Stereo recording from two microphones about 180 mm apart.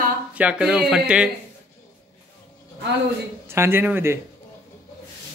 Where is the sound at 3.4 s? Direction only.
15° right (ahead or behind).